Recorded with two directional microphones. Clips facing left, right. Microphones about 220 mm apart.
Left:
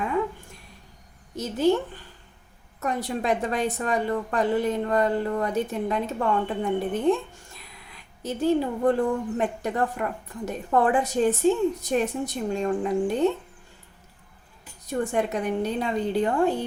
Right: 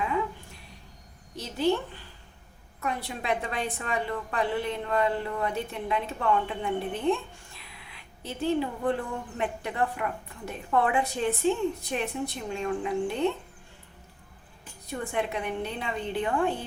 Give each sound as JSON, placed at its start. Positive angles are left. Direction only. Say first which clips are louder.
{"t": 1.4, "sound": "a woman's voice", "louder": "left 4 dB", "side_deg": 45}
{"t": 2.8, "sound": "a woman's voice", "louder": "left 5 dB", "side_deg": 40}
{"t": 14.8, "sound": "a woman's voice", "louder": "left 5 dB", "side_deg": 40}